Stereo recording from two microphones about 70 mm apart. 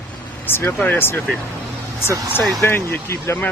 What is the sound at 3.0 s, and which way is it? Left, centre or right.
Speech, left.